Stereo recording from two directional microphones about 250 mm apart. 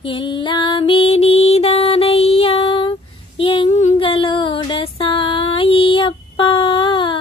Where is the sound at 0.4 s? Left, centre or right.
Centre.